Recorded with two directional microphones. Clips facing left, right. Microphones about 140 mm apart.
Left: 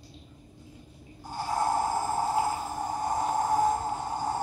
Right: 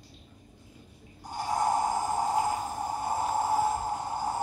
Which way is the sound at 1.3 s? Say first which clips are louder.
Even; 15° right (ahead or behind).